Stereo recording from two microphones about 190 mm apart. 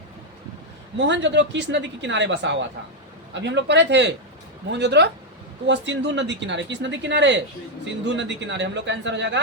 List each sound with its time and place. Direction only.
0.9 s speech: 70° right (ahead or behind)